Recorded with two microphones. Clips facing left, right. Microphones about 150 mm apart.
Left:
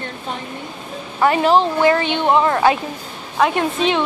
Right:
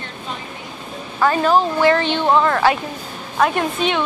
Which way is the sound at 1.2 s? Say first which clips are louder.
Left 1 dB; 20° left (ahead or behind).